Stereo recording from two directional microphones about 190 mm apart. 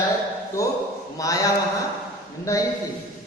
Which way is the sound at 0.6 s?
15° left (ahead or behind).